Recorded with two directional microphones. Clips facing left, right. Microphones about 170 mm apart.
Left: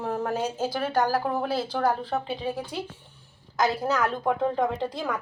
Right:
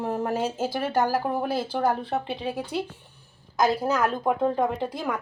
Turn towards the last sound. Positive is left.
turn(degrees=-10)  # may be behind; listen again after turning